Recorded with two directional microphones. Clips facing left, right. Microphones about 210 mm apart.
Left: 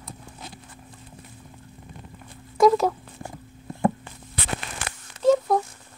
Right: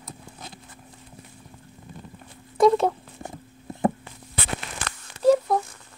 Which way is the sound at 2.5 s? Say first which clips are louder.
Even; 30° right (ahead or behind).